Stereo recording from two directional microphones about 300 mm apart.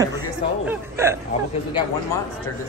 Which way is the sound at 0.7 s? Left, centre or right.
Centre.